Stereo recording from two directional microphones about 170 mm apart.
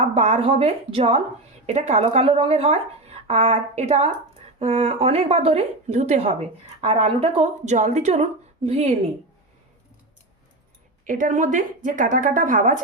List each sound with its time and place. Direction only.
0.0 s a woman's voice: 40° right (ahead or behind)
11.0 s a woman's voice: 50° right (ahead or behind)